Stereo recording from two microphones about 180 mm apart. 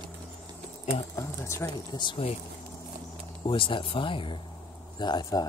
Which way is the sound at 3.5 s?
30° left (ahead or behind).